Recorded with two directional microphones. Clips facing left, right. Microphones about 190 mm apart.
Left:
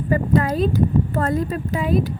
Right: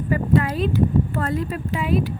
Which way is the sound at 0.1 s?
40° left (ahead or behind).